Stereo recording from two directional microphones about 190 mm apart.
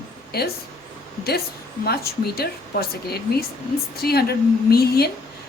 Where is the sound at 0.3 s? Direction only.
55° left (ahead or behind).